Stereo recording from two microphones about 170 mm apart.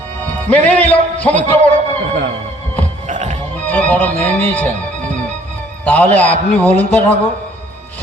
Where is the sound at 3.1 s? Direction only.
45° right (ahead or behind).